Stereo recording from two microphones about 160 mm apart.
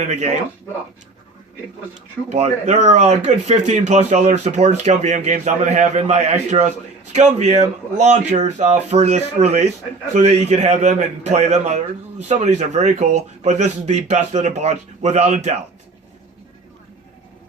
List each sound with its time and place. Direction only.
0.1 s speech: 45° right (ahead or behind)
2.3 s speech: 45° right (ahead or behind)